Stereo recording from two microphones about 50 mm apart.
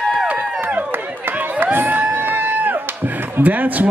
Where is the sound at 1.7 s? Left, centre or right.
Right.